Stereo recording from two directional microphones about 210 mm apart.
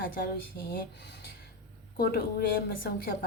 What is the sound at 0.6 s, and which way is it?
Speech, 50° left (ahead or behind).